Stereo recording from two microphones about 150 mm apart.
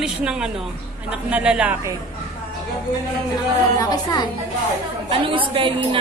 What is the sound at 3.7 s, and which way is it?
Speech, 25° left (ahead or behind).